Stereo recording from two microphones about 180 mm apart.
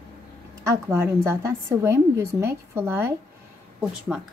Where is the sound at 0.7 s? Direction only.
15° right (ahead or behind).